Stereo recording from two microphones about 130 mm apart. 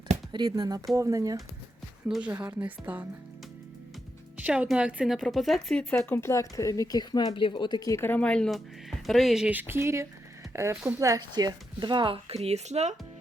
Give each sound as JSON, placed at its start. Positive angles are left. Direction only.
{"t": 0.3, "sound": "speech", "side_deg": -30}
{"t": 2.0, "sound": "speech", "side_deg": -5}
{"t": 4.4, "sound": "speech", "side_deg": -10}